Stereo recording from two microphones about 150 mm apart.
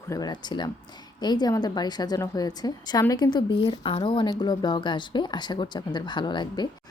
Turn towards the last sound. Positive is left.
turn(degrees=30)  # may be behind; listen again after turning